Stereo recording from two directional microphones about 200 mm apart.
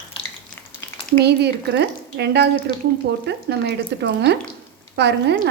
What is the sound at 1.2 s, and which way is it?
A woman's voice, 55° right (ahead or behind).